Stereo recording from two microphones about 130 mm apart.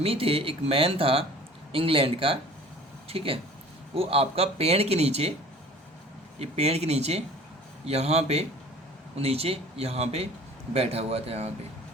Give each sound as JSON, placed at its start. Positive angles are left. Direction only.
{"t": 0.0, "sound": "speech", "side_deg": -50}
{"t": 6.4, "sound": "a man's voice", "side_deg": -55}